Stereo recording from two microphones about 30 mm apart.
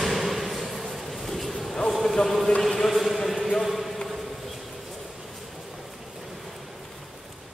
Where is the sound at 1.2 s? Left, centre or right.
Centre.